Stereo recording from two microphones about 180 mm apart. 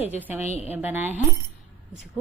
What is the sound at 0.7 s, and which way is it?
Speech, 10° right (ahead or behind).